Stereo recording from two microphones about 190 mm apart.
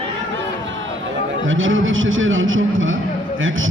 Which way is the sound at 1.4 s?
90° right.